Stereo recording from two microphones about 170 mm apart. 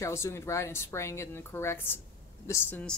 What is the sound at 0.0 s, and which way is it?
A woman's voice, 15° left (ahead or behind).